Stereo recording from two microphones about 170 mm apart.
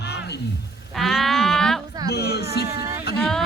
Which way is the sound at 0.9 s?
Centre (ahead or behind).